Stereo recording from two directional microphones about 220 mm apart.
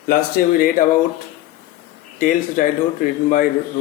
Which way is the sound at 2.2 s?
35° left (ahead or behind).